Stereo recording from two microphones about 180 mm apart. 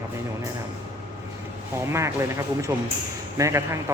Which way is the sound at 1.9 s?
15° right (ahead or behind).